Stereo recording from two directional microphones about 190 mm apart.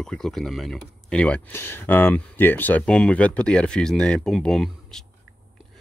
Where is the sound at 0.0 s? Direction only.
Centre (ahead or behind).